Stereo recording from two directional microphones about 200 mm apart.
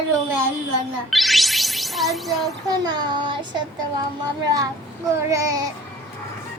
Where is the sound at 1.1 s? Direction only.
Centre (ahead or behind).